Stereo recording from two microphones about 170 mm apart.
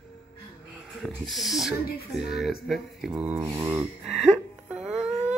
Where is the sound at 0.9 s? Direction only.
Centre (ahead or behind).